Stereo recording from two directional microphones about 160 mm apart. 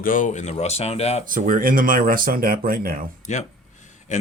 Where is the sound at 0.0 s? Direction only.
55° left (ahead or behind).